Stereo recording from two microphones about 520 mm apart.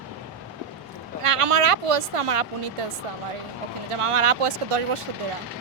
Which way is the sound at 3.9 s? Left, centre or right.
Right.